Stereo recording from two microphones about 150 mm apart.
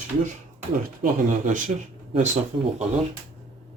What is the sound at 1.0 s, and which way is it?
Speech, 55° right (ahead or behind).